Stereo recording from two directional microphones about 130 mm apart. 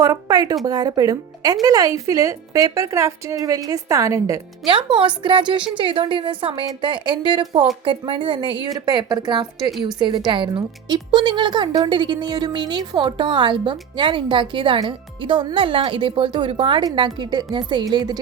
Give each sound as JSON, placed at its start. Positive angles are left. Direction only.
{"t": 0.0, "sound": "a woman's voice", "side_deg": -30}
{"t": 4.6, "sound": "a woman's voice", "side_deg": -40}